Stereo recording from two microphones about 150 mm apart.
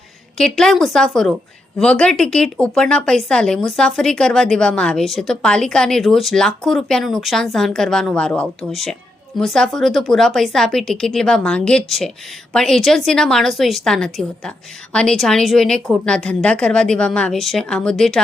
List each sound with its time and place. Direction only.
0.3 s speech: 5° left (ahead or behind)